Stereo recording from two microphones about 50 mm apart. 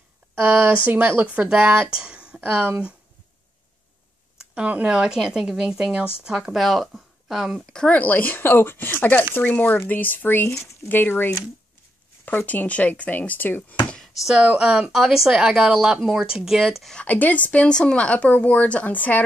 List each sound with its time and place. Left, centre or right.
0.4 s speech: right
1.2 s speech: right
2.4 s speech: right
4.8 s a woman's voice: centre
6.5 s speech: centre
7.9 s speech: left
8.4 s speech: left
14.3 s speech: right
14.9 s a woman's voice: centre
17.0 s speech: left